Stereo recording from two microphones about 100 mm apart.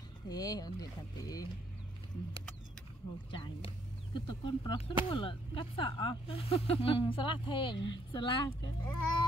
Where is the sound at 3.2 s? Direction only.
60° left (ahead or behind).